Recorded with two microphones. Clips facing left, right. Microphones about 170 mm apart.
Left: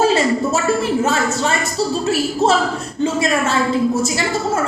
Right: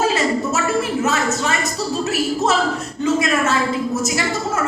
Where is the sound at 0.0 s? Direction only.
30° left (ahead or behind).